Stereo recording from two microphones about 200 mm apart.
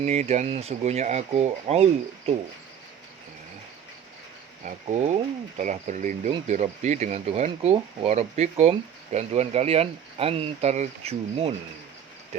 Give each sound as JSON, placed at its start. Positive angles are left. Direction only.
{"t": 0.0, "sound": "speech", "side_deg": -35}
{"t": 4.6, "sound": "speech", "side_deg": -35}